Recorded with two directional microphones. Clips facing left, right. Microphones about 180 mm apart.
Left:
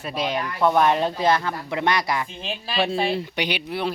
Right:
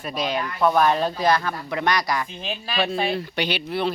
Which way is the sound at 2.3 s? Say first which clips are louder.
Even; centre (ahead or behind).